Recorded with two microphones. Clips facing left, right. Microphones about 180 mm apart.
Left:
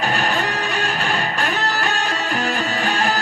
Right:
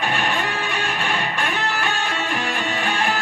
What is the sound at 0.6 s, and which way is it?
Music, centre (ahead or behind).